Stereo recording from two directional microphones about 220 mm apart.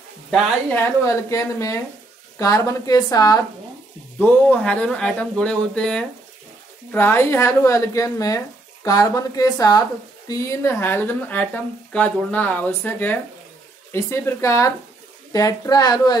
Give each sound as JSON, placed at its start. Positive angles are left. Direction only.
{"t": 0.3, "sound": "a woman's voice", "side_deg": 10}